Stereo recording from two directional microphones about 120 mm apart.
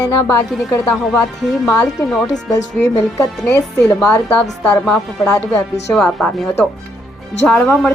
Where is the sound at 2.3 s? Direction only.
25° left (ahead or behind).